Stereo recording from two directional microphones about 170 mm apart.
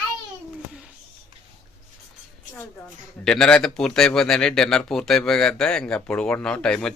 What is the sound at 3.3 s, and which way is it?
Speech, 5° left (ahead or behind).